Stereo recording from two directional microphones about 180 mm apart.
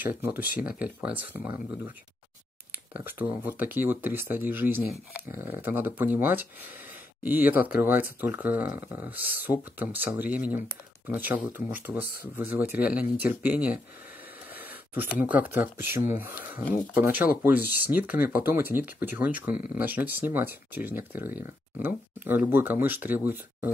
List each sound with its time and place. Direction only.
0.0 s speech: 10° right (ahead or behind)
2.9 s speech: 10° right (ahead or behind)
14.5 s a sound: 10° right (ahead or behind)
15.4 s speech: 10° right (ahead or behind)